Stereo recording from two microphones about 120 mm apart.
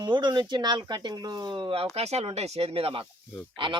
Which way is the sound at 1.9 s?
65° right (ahead or behind).